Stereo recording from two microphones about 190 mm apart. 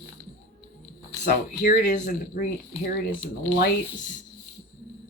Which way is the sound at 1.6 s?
45° left (ahead or behind).